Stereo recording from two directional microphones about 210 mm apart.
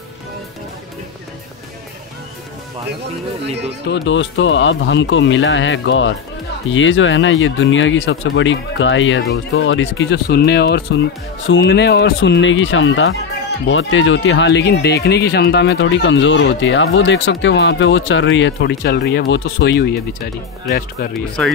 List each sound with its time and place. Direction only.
3.8 s speech: 55° left (ahead or behind)